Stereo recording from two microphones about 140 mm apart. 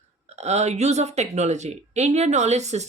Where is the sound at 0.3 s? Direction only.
55° right (ahead or behind).